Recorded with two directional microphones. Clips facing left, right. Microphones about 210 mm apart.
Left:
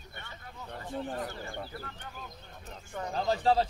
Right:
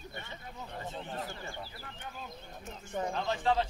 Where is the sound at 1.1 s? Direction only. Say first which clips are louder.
Left 3 dB; 45° left (ahead or behind).